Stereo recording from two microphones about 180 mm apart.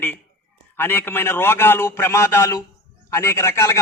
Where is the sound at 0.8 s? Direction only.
10° left (ahead or behind).